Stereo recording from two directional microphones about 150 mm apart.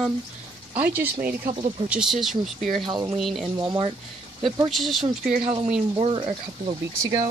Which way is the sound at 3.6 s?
35° right (ahead or behind).